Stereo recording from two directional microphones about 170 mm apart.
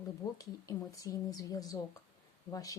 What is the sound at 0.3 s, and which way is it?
Speech, 20° left (ahead or behind).